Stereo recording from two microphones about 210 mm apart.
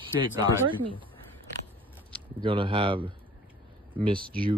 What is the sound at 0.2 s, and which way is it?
Speech, 25° right (ahead or behind).